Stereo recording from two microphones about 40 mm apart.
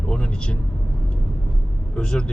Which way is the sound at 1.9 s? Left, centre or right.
Left.